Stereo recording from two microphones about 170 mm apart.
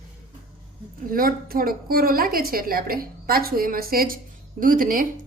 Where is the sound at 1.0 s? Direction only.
55° right (ahead or behind).